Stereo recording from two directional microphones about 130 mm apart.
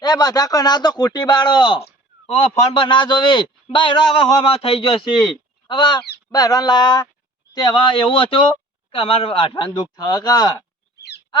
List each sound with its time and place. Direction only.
0.0 s a man's voice: 30° left (ahead or behind)
2.3 s a man's voice: 50° left (ahead or behind)
9.9 s speech: 30° left (ahead or behind)